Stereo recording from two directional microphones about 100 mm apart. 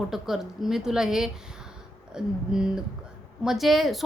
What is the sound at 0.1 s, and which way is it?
A woman's voice, 5° right (ahead or behind).